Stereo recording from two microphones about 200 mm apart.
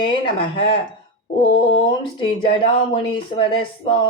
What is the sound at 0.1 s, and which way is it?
Speech, 25° left (ahead or behind).